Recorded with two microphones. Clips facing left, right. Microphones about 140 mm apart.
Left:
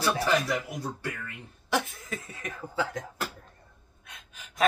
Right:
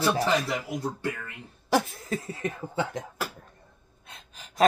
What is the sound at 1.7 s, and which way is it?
Chuckle, 35° right (ahead or behind).